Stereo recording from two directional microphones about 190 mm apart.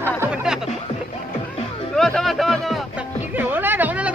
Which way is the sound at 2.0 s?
Centre (ahead or behind).